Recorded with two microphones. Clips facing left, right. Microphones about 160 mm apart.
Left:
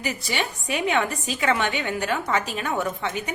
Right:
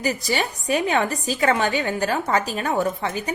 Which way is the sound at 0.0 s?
40° right (ahead or behind).